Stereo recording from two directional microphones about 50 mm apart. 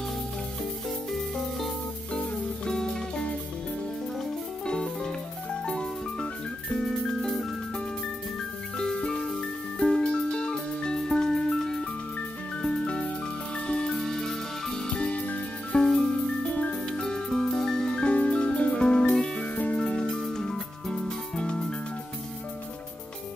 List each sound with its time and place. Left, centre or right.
1.1 s music: centre
4.6 s music: centre
8.7 s music: centre
12.6 s music: left
13.9 s music: centre
15.0 s music: left
15.7 s music: centre
16.4 s music: left
16.9 s music: centre
17.9 s music: left
19.5 s music: left